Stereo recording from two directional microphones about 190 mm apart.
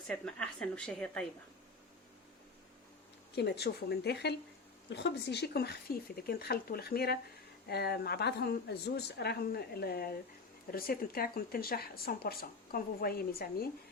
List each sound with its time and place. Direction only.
0.1 s a woman's voice: 5° left (ahead or behind)
3.3 s a woman's voice: 60° left (ahead or behind)